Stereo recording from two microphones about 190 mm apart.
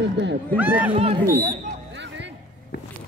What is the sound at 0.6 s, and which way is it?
Speech, 10° right (ahead or behind).